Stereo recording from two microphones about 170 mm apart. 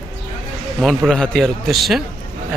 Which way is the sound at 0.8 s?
Centre (ahead or behind).